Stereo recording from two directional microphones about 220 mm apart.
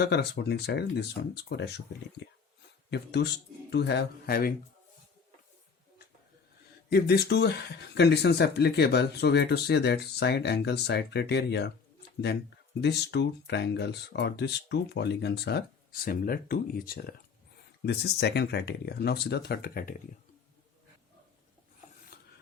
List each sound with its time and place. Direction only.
0.0 s speech: 50° left (ahead or behind)
2.9 s speech: 50° left (ahead or behind)
6.9 s speech: 45° left (ahead or behind)
12.8 s speech: 50° left (ahead or behind)